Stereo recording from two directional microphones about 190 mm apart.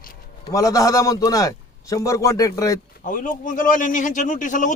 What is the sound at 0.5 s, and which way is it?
A man's voice, 15° left (ahead or behind).